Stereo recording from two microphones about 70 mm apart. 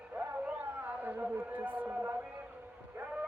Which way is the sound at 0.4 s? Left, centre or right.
Right.